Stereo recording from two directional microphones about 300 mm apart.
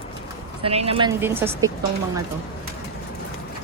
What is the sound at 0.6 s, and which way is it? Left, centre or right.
Speech, centre.